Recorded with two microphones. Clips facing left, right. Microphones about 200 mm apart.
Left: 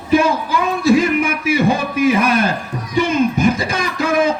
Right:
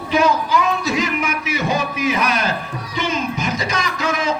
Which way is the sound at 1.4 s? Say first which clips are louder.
Left 7 dB; 30° left (ahead or behind).